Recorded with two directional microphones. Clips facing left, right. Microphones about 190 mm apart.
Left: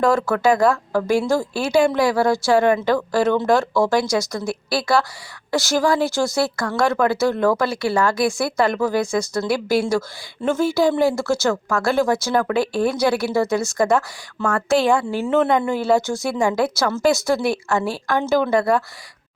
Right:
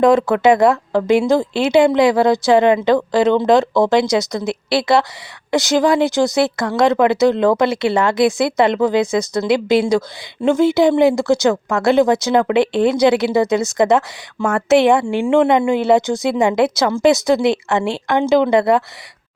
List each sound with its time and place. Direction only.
0.0 s speech: 20° right (ahead or behind)